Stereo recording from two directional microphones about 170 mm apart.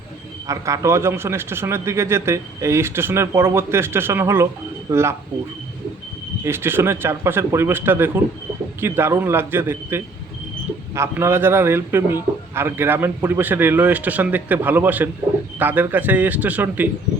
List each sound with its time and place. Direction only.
0.4 s a man's voice: 20° right (ahead or behind)
6.4 s a man's voice: 15° right (ahead or behind)